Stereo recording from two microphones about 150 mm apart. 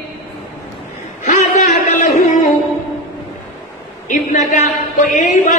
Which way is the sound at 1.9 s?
60° left (ahead or behind).